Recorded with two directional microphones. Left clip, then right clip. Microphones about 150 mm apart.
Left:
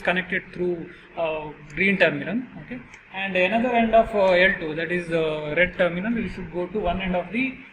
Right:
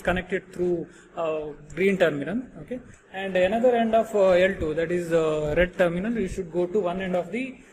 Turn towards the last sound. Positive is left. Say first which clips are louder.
# left 2 dB
turn(degrees=-45)  # may be behind; listen again after turning